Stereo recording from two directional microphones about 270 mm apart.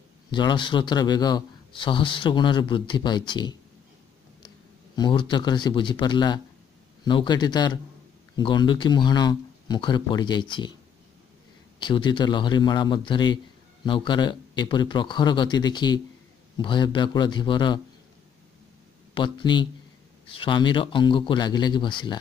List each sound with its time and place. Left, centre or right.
0.3 s a man's voice: centre
4.9 s a man's voice: centre
11.8 s a man's voice: centre
19.1 s a man's voice: centre